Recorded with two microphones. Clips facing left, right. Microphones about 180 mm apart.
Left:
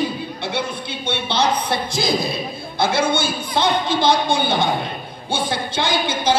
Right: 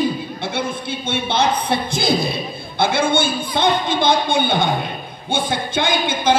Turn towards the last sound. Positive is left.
turn(degrees=-55)  # may be behind; listen again after turning